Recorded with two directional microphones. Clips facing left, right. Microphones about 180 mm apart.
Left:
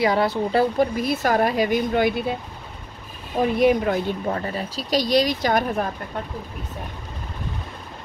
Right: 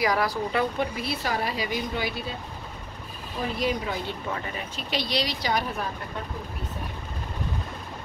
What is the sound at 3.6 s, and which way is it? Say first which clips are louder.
Speech: left 10 dB; 55° left (ahead or behind).